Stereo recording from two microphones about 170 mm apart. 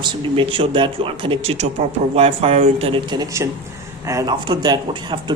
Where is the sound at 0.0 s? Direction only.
30° right (ahead or behind).